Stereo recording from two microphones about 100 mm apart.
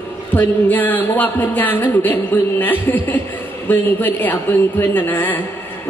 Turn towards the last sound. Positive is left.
turn(degrees=20)  # may be behind; listen again after turning